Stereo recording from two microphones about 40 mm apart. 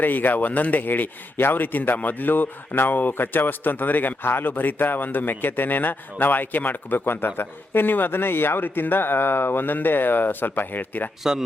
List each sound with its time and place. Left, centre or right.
0.0 s a man's voice: left
11.2 s speech: centre